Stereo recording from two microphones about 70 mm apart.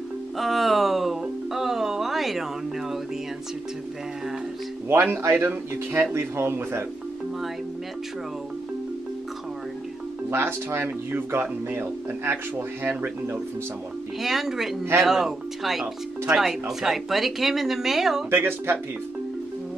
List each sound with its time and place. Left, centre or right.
0.4 s music: centre
4.8 s speech: right
10.3 s speech: right
14.2 s speech: centre
18.3 s speech: right